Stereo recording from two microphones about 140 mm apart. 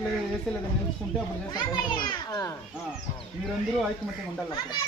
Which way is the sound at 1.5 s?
30° left (ahead or behind).